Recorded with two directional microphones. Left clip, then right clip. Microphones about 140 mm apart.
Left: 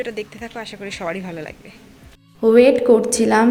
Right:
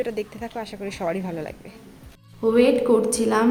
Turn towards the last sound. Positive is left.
turn(degrees=30)  # may be behind; listen again after turning